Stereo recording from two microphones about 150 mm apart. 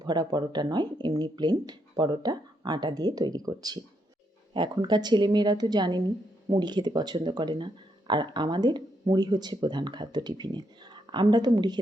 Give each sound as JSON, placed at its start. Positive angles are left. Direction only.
{"t": 0.0, "sound": "speech", "side_deg": -30}